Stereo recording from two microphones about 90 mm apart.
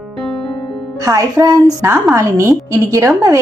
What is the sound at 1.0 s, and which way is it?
A woman's voice, 40° right (ahead or behind).